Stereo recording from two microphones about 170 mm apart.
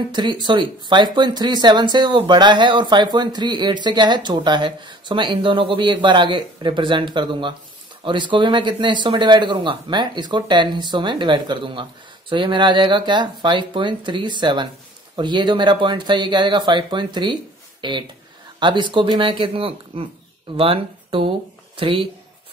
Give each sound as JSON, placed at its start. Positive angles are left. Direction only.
{"t": 0.1, "sound": "speech", "side_deg": -25}